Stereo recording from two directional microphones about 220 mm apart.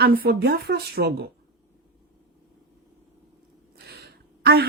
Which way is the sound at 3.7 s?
45° right (ahead or behind).